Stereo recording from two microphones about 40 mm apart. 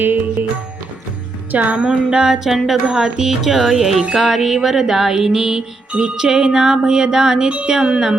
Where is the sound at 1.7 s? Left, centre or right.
Right.